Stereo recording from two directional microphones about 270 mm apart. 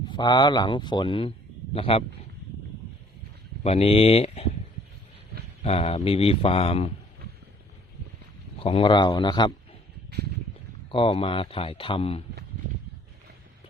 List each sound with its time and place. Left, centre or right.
0.0 s a man's voice: centre
3.6 s speech: left
5.6 s speech: left
8.5 s a man's voice: centre
10.9 s speech: centre